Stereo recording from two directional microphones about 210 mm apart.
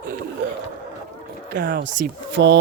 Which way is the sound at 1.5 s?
50° right (ahead or behind).